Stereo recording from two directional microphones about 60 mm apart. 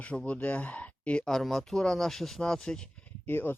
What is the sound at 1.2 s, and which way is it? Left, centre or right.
Speech, centre.